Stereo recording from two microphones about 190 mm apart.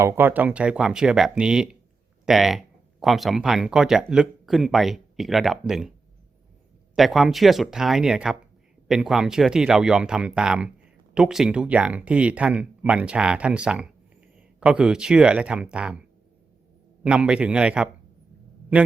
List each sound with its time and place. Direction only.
0.0 s speech: 10° right (ahead or behind)
6.9 s speech: centre (ahead or behind)
17.0 s speech: 5° right (ahead or behind)